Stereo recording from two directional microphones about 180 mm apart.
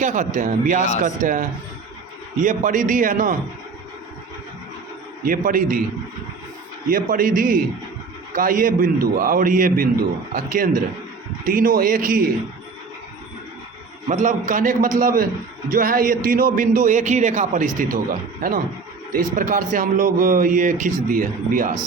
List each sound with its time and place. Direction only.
0.0 s a man's voice: 45° right (ahead or behind)
5.2 s a man's voice: 50° right (ahead or behind)
6.9 s a man's voice: 50° right (ahead or behind)
14.1 s a man's voice: 45° right (ahead or behind)